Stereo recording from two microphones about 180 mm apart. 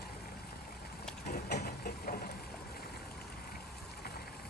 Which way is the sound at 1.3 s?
60° left (ahead or behind).